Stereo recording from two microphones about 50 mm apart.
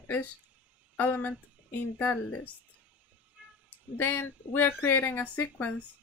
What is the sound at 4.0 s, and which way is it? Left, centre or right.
A woman's voice, left.